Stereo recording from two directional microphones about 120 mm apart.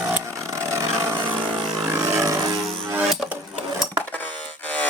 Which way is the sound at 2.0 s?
25° right (ahead or behind).